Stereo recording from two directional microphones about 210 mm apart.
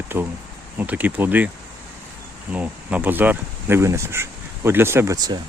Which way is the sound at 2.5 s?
5° right (ahead or behind).